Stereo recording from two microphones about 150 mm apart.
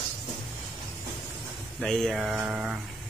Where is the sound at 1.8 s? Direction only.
5° left (ahead or behind).